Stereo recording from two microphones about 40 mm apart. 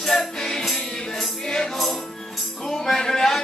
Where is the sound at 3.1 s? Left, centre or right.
Centre.